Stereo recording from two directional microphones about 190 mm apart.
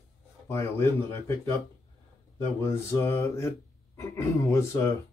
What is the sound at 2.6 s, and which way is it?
Speech, 10° left (ahead or behind).